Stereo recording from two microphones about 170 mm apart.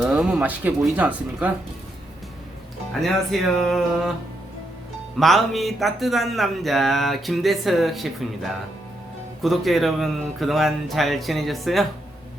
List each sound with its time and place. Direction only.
0.0 s speech: 5° right (ahead or behind)
3.0 s speech: centre (ahead or behind)
5.2 s speech: centre (ahead or behind)
9.4 s speech: centre (ahead or behind)